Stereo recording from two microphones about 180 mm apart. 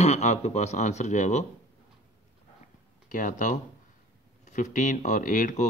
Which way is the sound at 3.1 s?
45° left (ahead or behind).